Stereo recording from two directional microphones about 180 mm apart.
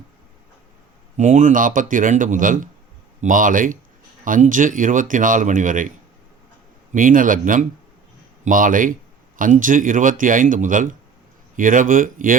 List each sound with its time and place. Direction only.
1.1 s speech: 40° right (ahead or behind)
6.9 s speech: 50° right (ahead or behind)